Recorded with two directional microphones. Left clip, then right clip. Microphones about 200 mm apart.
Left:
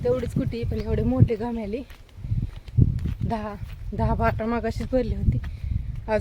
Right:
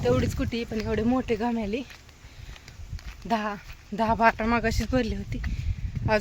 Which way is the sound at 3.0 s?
5° right (ahead or behind).